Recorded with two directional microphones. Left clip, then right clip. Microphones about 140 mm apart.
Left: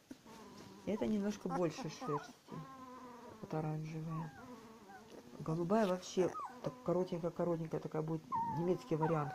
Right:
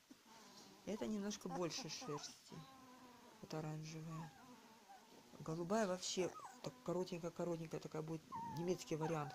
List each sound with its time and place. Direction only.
0.8 s speech: 15° right (ahead or behind)
3.4 s speech: 15° right (ahead or behind)
5.4 s speech: 15° right (ahead or behind)